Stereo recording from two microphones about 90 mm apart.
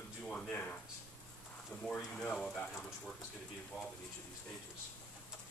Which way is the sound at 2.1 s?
5° left (ahead or behind).